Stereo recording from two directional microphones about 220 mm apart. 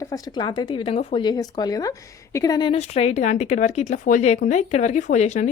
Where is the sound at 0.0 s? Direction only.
15° left (ahead or behind).